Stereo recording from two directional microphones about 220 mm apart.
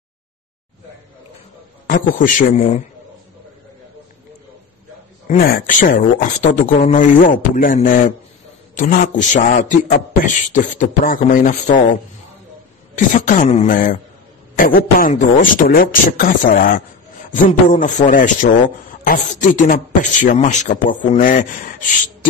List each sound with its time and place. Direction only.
1.9 s a man's voice: 40° left (ahead or behind)
5.3 s a man's voice: 35° left (ahead or behind)